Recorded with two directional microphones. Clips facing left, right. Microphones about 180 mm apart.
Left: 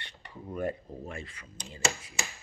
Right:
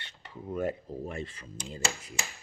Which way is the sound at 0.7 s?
20° right (ahead or behind).